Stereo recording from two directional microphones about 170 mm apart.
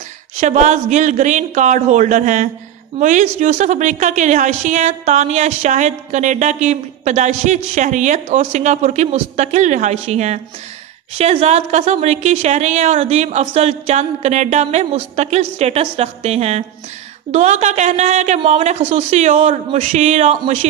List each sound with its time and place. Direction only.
0.4 s a woman's voice: 45° right (ahead or behind)